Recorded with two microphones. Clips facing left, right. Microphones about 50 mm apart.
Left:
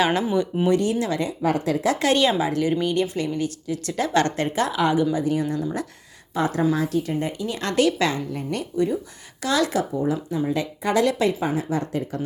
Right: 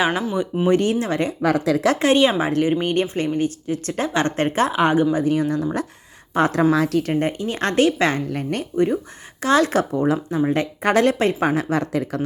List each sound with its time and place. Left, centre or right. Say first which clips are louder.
0.0 s speech: even; centre
0.7 s a woman's voice: right 4 dB; right
1.4 s speech: right 4 dB; right
2.0 s a woman's voice: right 3 dB; right
2.4 s a woman's voice: right 2 dB; right
6.3 s a woman's voice: right 5 dB; right
7.1 s a woman's voice: right 4 dB; right
8.1 s a woman's voice: right 3 dB; right
9.7 s speech: right 4 dB; right
10.3 s a woman's voice: right 4 dB; right